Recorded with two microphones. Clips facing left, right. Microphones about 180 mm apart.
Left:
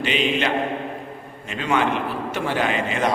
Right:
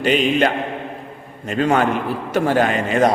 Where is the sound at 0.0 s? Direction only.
45° right (ahead or behind).